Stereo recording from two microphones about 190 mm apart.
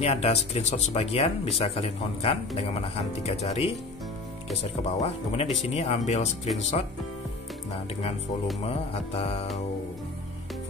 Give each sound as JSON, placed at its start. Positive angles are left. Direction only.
{"t": 0.0, "sound": "speech", "side_deg": 35}
{"t": 8.6, "sound": "speech", "side_deg": 30}